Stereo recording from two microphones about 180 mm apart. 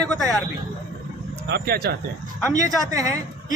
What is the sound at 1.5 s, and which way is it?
Speech, 65° right (ahead or behind).